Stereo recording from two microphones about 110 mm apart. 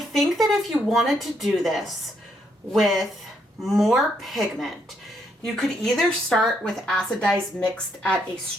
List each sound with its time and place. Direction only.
0.1 s speech: centre (ahead or behind)